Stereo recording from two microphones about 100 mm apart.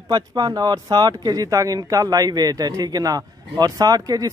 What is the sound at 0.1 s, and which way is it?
Speech, 40° right (ahead or behind).